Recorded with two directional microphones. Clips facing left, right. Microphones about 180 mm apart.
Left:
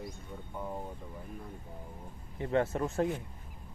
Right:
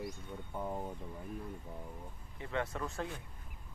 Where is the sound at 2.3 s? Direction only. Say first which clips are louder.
Left 8 dB; 35° left (ahead or behind).